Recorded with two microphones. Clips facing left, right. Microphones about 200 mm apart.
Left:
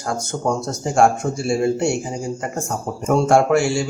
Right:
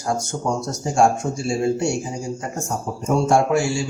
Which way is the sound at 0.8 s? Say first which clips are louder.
Left 2 dB; 60° left (ahead or behind).